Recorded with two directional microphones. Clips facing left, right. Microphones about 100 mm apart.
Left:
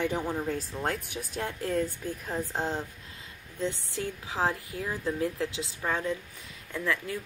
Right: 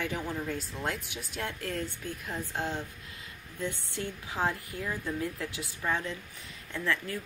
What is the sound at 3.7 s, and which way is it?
Speech, 20° right (ahead or behind).